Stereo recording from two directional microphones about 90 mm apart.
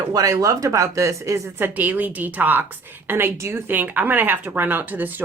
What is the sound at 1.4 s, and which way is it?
Speech, 20° right (ahead or behind).